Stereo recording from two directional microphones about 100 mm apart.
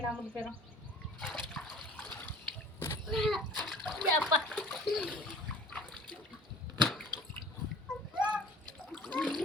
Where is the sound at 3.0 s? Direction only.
Centre (ahead or behind).